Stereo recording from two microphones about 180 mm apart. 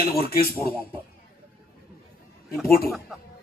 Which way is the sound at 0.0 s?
55° left (ahead or behind).